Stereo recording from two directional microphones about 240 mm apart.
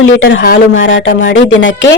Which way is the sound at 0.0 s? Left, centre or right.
Left.